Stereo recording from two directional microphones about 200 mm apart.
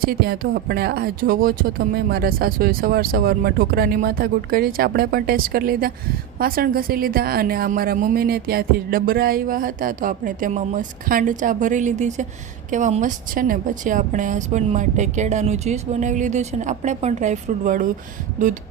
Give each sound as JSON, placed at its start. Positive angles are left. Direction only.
{"t": 0.0, "sound": "a woman's voice", "side_deg": -50}